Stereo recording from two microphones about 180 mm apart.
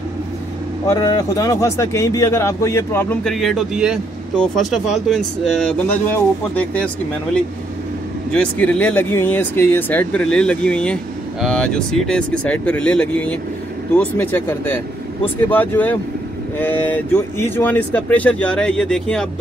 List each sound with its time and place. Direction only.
0.8 s speech: 20° left (ahead or behind)
3.3 s speech: centre (ahead or behind)
8.3 s speech: 5° left (ahead or behind)